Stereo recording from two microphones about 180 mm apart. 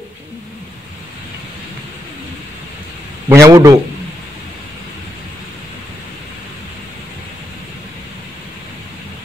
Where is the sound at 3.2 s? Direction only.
15° right (ahead or behind).